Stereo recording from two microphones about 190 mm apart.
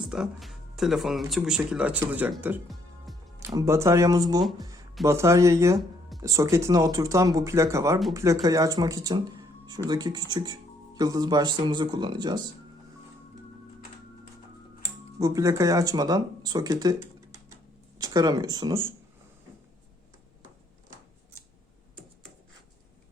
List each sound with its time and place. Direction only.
0.1 s speech: centre (ahead or behind); by 12.4 s 25° right (ahead or behind)
15.2 s speech: 15° right (ahead or behind)